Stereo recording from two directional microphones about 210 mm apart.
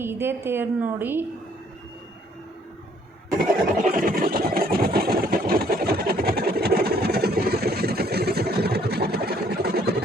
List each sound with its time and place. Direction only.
0.0 s a woman's voice: 10° right (ahead or behind)
3.9 s vehicle: 40° right (ahead or behind)